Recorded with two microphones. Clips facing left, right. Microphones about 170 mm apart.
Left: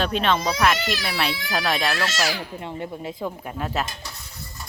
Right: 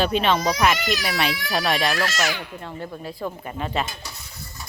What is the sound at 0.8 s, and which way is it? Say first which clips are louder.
Speech: right 2 dB; 30° left (ahead or behind).